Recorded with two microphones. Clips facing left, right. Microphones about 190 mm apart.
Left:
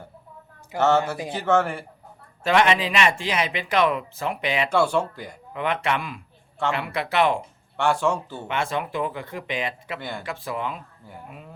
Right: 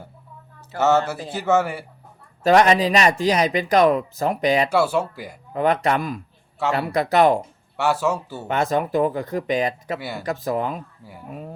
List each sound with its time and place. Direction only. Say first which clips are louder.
0.8 s speech: right 1 dB; 5° right (ahead or behind)
2.4 s speech: right 5 dB; 40° right (ahead or behind)
4.7 s speech: right 1 dB; 5° right (ahead or behind)
5.5 s speech: right 6 dB; 40° right (ahead or behind)
7.8 s speech: right 1 dB; 5° right (ahead or behind)
8.4 s speech: right 6 dB; 40° right (ahead or behind)
10.0 s speech: right 2 dB; 5° right (ahead or behind)
10.2 s speech: right 8 dB; 40° right (ahead or behind)